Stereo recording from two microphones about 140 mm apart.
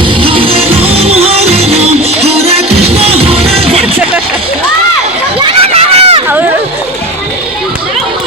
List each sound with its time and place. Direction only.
0.0 s music: 40° right (ahead or behind)
5.5 s run: 45° right (ahead or behind)